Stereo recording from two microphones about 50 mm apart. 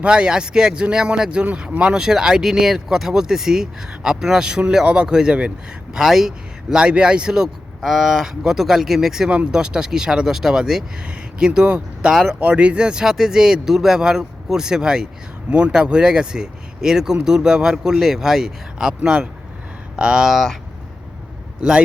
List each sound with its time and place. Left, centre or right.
0.0 s speech: centre
6.0 s speech: centre